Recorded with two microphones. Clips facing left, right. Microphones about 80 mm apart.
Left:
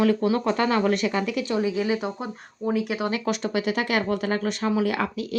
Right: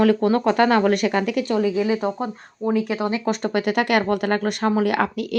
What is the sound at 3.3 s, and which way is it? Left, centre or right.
A woman's voice, right.